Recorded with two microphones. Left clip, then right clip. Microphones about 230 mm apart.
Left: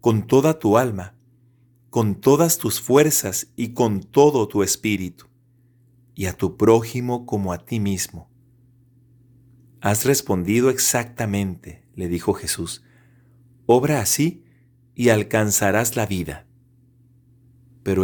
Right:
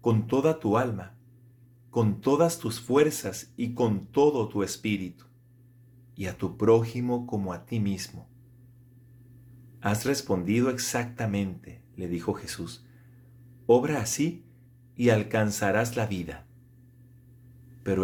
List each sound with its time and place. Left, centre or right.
0.0 s speech: left
9.8 s speech: left
17.8 s speech: left